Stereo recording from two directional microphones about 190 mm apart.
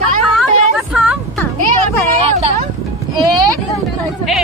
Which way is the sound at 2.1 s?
30° right (ahead or behind).